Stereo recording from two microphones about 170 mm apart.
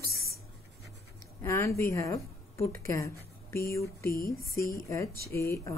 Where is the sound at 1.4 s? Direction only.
15° left (ahead or behind).